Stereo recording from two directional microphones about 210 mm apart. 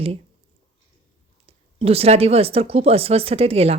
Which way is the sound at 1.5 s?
30° right (ahead or behind).